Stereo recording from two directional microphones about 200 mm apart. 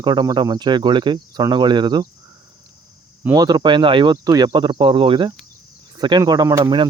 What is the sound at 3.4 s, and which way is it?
Speech, 20° right (ahead or behind).